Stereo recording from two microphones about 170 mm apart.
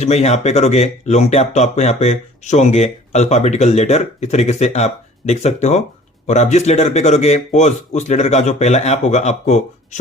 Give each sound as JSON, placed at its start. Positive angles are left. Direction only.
{"t": 0.0, "sound": "speech", "side_deg": 40}